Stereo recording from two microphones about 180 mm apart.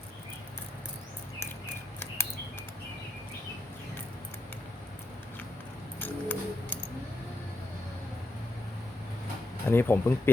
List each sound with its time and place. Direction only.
2.2 s a sound: 15° left (ahead or behind)
6.0 s music: 10° left (ahead or behind)
9.6 s speech: 10° left (ahead or behind)